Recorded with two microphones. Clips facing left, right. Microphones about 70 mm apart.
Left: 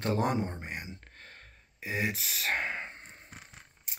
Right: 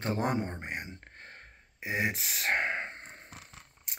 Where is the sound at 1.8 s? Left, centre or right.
Right.